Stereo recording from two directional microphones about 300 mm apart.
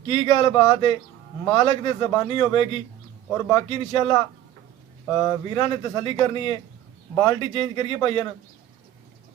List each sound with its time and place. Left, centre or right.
0.1 s speech: centre
5.0 s speech: centre